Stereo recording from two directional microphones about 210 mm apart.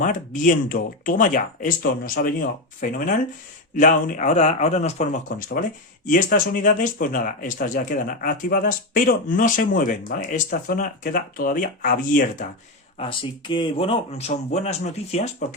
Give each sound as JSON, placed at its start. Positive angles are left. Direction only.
{"t": 0.0, "sound": "speech", "side_deg": 40}
{"t": 13.0, "sound": "speech", "side_deg": 25}